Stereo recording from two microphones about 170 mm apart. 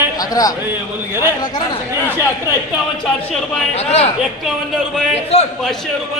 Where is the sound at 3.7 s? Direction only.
40° left (ahead or behind).